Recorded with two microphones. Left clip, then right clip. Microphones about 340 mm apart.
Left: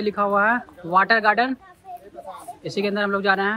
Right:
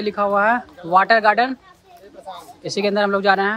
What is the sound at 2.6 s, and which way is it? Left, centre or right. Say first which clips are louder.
Speech: right 4 dB; centre.